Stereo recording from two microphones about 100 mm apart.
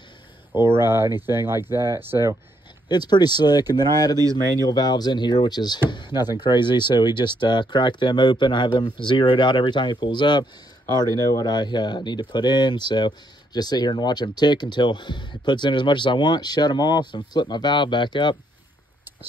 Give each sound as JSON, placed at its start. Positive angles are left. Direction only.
{"t": 0.6, "sound": "speech", "side_deg": -25}
{"t": 2.9, "sound": "speech", "side_deg": 45}